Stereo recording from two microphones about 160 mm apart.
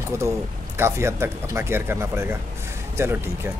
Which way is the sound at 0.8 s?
15° right (ahead or behind).